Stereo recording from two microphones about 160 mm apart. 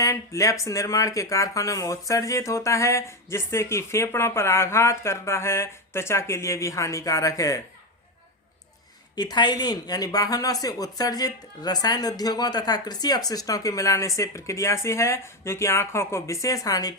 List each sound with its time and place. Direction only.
0.0 s speech: 20° left (ahead or behind)
9.1 s speech: 25° left (ahead or behind)